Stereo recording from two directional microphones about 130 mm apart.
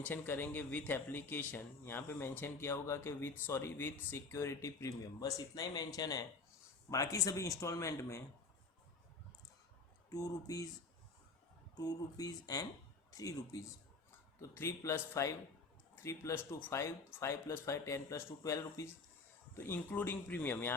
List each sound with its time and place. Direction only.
0.0 s speech: 15° left (ahead or behind)
10.1 s speech: 25° left (ahead or behind)
11.8 s speech: 30° left (ahead or behind); by 20.7 s 15° left (ahead or behind)